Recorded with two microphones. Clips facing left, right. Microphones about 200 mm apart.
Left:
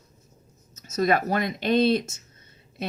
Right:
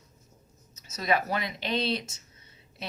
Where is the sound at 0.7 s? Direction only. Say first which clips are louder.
Left 5 dB; 45° left (ahead or behind).